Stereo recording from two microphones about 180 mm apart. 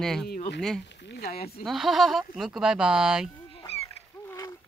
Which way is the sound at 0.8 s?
75° left (ahead or behind).